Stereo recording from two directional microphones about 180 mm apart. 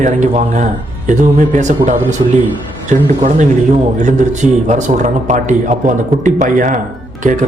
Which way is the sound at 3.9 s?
40° right (ahead or behind).